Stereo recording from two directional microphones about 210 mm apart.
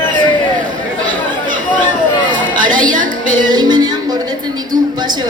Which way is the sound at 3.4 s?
20° right (ahead or behind).